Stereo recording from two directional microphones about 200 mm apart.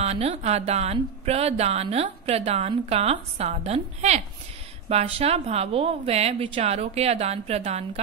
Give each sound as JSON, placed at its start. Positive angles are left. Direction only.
{"t": 0.0, "sound": "speech", "side_deg": -30}